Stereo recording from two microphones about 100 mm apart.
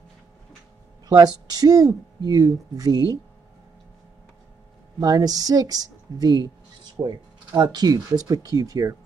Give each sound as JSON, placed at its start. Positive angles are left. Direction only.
{"t": 1.0, "sound": "speech", "side_deg": -40}
{"t": 5.0, "sound": "speech", "side_deg": -40}